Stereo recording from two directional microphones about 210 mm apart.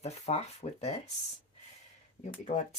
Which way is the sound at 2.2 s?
35° left (ahead or behind).